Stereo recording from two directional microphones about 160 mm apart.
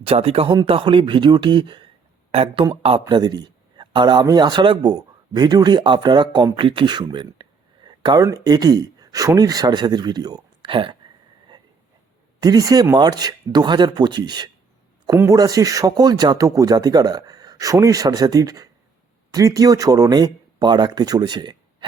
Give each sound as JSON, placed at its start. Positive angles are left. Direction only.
{"t": 0.0, "sound": "a man's voice", "side_deg": -35}
{"t": 12.4, "sound": "a man's voice", "side_deg": -25}